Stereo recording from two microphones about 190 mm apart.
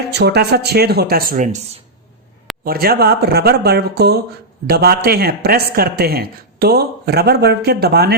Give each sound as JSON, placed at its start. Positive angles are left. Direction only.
{"t": 0.2, "sound": "speech", "side_deg": -60}
{"t": 2.6, "sound": "speech", "side_deg": -55}